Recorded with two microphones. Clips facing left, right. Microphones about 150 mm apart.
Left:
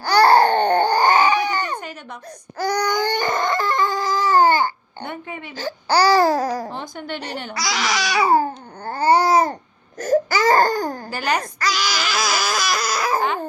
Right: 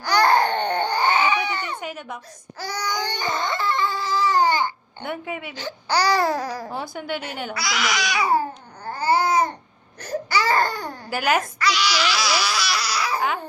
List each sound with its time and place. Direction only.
0.0 s baby cry: 35° left (ahead or behind)
1.8 s a sound: 5° right (ahead or behind)
2.6 s baby cry: 55° left (ahead or behind)
5.0 s speech: 5° right (ahead or behind)
5.5 s speech: 40° left (ahead or behind)
6.3 s speech: 45° left (ahead or behind)
6.9 s speech: 5° right (ahead or behind)
7.5 s babbling: 35° left (ahead or behind)
10.0 s baby cry: 45° left (ahead or behind)
11.1 s a child's voice: 5° right (ahead or behind)
11.6 s speech: 45° left (ahead or behind)